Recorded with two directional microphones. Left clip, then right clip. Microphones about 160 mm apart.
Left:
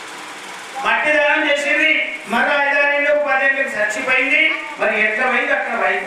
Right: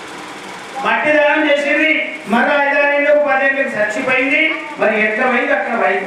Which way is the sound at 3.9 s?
10° right (ahead or behind).